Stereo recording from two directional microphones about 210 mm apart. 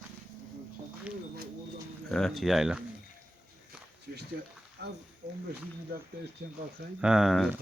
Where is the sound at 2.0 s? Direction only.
Centre (ahead or behind).